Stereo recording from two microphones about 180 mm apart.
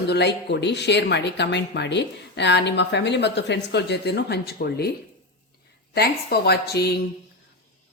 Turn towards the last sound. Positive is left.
turn(degrees=65)  # may be behind; listen again after turning